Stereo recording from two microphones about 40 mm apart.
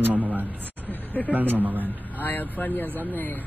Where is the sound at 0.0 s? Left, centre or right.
Right.